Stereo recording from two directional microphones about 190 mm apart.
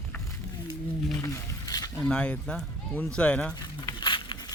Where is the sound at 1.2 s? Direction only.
15° left (ahead or behind).